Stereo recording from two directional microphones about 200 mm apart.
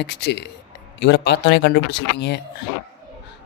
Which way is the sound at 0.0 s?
60° left (ahead or behind).